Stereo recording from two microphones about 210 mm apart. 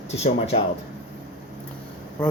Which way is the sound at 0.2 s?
30° left (ahead or behind).